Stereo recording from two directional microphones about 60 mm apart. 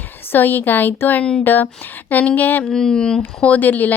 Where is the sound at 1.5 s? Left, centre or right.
Left.